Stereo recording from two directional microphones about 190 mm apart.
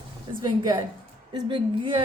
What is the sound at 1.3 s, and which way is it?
Speech, 25° right (ahead or behind).